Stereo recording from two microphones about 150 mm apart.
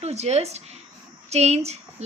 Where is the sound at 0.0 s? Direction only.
45° right (ahead or behind).